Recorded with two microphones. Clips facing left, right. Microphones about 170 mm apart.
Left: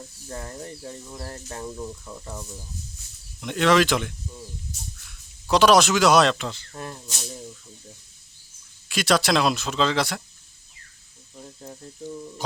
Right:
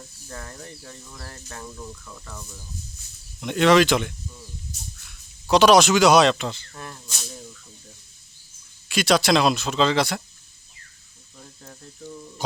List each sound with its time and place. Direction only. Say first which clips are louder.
0.3 s speech: left 4 dB; 25° left (ahead or behind)
3.4 s speech: right 3 dB; centre (ahead or behind)
5.5 s speech: right 2 dB; centre (ahead or behind)
6.7 s speech: left 3 dB; 30° left (ahead or behind)
8.9 s speech: right 2 dB; centre (ahead or behind)
11.3 s speech: left 5 dB; 20° left (ahead or behind)
12.4 s speech: right 2 dB; centre (ahead or behind)